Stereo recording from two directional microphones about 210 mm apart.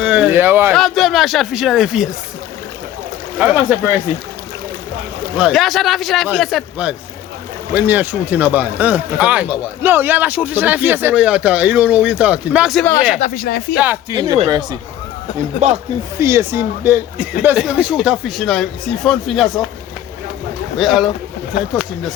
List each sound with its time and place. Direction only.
0.0 s a sound: 5° right (ahead or behind)
0.7 s speech: centre (ahead or behind)
3.3 s speech: 5° right (ahead or behind)
5.4 s speech: centre (ahead or behind)
13.1 s speech: 40° left (ahead or behind)
13.7 s speech: 10° right (ahead or behind)
16.2 s speech: 10° right (ahead or behind)
20.7 s speech: centre (ahead or behind)